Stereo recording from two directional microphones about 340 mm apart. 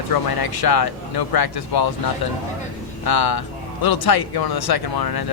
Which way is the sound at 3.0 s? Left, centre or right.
Left.